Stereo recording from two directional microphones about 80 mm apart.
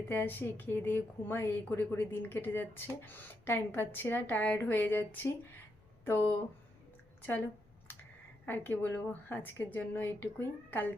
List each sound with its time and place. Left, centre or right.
0.1 s a woman's voice: left
8.4 s a woman's voice: left